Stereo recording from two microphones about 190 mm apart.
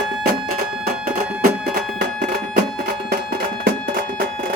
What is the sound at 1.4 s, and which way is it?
Music, 55° right (ahead or behind).